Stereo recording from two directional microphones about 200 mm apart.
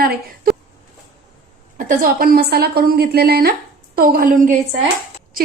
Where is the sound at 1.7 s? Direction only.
45° right (ahead or behind).